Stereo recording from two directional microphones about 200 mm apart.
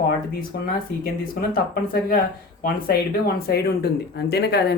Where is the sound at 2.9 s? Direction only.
50° left (ahead or behind).